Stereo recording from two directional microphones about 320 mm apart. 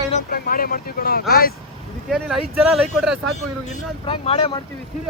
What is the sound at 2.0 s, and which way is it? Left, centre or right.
Speech, centre.